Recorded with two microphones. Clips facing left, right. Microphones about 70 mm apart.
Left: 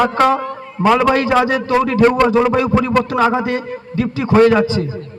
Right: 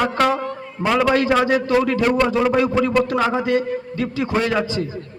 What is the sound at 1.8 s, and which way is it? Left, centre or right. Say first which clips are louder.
Speech: left 5 dB; left.